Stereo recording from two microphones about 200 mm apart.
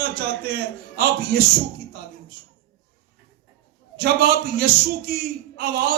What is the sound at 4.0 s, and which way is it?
A man's voice, 50° right (ahead or behind).